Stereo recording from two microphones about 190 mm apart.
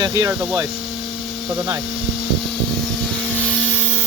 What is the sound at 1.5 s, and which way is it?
Speech, 20° right (ahead or behind).